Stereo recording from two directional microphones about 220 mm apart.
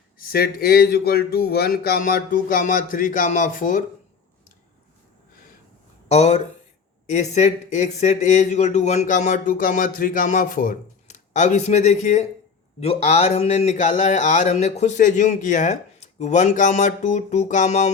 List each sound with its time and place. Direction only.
0.2 s speech: 45° left (ahead or behind)
6.1 s speech: 30° left (ahead or behind)